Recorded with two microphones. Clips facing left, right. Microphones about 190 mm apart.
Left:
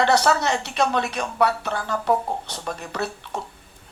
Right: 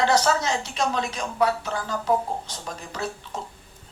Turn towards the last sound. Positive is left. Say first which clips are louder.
# left 3 dB
turn(degrees=65)  # may be behind; listen again after turning